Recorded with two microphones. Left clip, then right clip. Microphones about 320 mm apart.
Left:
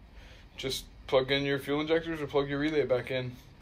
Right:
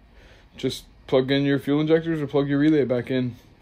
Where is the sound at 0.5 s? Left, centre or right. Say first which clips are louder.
Right 6 dB; right.